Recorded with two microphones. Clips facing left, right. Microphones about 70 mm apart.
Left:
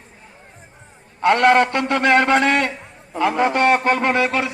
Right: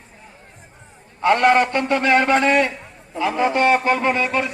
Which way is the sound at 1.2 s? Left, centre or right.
Left.